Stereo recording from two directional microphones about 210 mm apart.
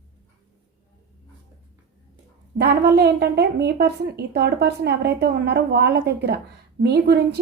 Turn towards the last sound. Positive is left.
turn(degrees=-50)  # may be behind; listen again after turning